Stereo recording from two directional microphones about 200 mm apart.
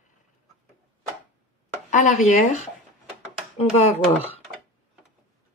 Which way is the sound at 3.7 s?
35° left (ahead or behind).